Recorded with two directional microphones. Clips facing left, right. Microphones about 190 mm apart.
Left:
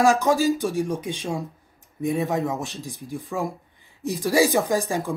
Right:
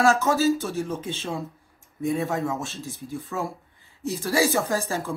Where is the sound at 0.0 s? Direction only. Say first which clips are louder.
Left 1 dB; 15° left (ahead or behind).